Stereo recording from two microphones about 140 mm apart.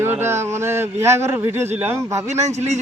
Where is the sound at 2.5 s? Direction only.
55° right (ahead or behind).